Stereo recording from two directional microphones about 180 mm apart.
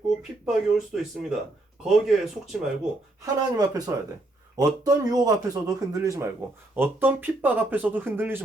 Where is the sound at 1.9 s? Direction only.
Centre (ahead or behind).